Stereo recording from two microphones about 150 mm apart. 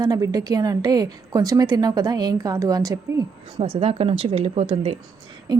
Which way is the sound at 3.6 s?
40° right (ahead or behind).